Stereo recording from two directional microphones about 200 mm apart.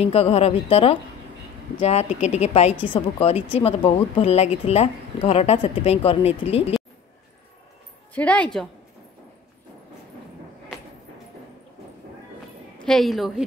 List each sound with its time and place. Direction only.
0.0 s a woman's voice: 30° left (ahead or behind)
8.1 s a woman's voice: 5° left (ahead or behind)
10.7 s a sound: centre (ahead or behind)
12.7 s a woman's voice: 5° left (ahead or behind)